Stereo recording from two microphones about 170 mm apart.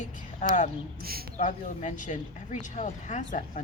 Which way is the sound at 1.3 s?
45° left (ahead or behind).